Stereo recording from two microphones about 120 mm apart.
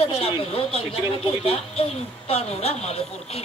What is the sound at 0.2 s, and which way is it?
A man's voice, 55° left (ahead or behind).